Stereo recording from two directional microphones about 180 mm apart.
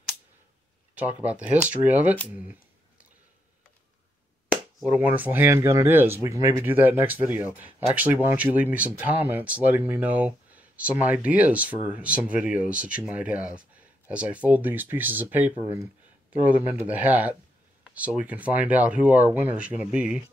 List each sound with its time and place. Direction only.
0.9 s speech: 10° right (ahead or behind)
4.5 s speech: 10° right (ahead or behind)
17.8 s a sound: 10° right (ahead or behind)
18.2 s speech: 10° right (ahead or behind)